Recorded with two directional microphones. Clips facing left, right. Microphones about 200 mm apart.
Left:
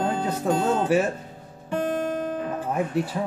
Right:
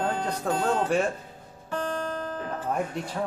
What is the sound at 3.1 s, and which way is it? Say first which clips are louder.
Speech: left 2 dB; 10° left (ahead or behind).